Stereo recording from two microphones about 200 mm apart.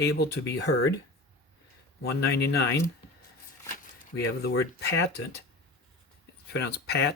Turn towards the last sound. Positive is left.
turn(degrees=55)  # may be behind; listen again after turning